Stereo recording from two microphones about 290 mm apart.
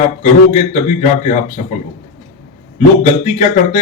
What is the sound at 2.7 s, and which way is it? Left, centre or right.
Speech, left.